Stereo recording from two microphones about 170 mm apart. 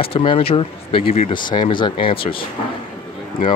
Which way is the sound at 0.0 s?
35° left (ahead or behind).